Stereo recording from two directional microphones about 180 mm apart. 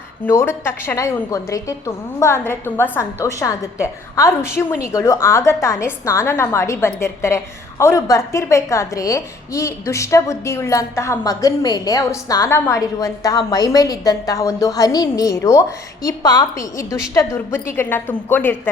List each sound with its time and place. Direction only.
0.3 s a woman's voice: 15° left (ahead or behind)